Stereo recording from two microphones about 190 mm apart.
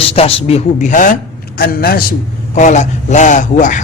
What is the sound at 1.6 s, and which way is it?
A man's voice, 55° left (ahead or behind).